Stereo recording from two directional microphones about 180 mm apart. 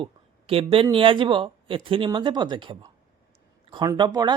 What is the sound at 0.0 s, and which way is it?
Speech, 30° right (ahead or behind).